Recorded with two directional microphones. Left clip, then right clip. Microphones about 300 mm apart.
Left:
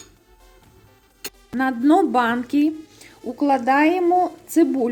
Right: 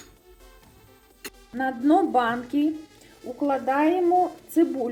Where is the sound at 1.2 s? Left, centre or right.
Left.